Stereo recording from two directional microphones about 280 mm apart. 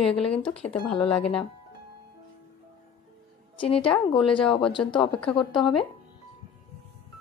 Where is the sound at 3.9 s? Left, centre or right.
Centre.